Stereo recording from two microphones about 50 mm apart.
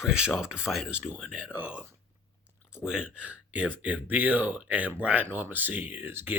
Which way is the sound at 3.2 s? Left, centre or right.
Right.